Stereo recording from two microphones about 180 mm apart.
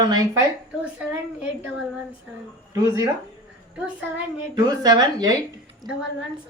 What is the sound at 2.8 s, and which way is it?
Speech, 15° right (ahead or behind).